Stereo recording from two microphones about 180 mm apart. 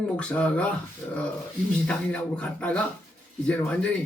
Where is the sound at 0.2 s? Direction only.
5° left (ahead or behind).